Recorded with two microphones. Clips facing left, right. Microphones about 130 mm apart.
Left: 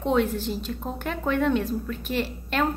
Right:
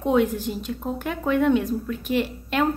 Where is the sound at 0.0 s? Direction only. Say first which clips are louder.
Right 2 dB; 15° right (ahead or behind).